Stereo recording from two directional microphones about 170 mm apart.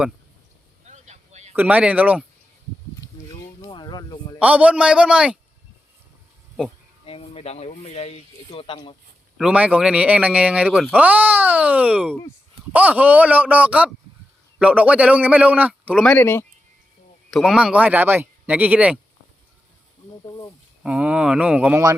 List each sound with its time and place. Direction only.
0.9 s vehicle: 45° right (ahead or behind)
1.5 s speech: 10° right (ahead or behind)
3.4 s a sound: 25° left (ahead or behind)
4.4 s speech: 10° right (ahead or behind)
7.0 s speech: 35° left (ahead or behind)
9.4 s speech: 5° right (ahead or behind)
16.0 s speech: 10° left (ahead or behind)
17.3 s speech: 5° right (ahead or behind)
20.2 s speech: 25° left (ahead or behind)
20.8 s speech: 5° right (ahead or behind)